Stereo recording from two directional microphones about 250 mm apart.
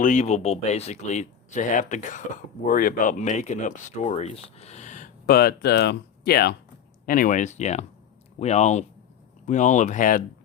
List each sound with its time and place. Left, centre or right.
0.0 s speech: left